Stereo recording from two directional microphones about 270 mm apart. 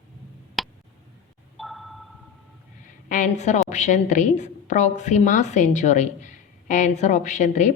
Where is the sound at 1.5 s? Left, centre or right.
Centre.